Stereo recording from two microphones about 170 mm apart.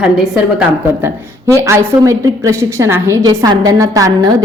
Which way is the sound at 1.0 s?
15° right (ahead or behind).